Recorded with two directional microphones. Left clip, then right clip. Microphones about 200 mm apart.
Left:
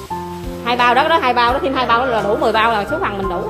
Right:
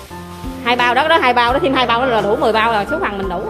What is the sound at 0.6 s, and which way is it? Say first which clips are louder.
A woman's voice: even; 15° right (ahead or behind).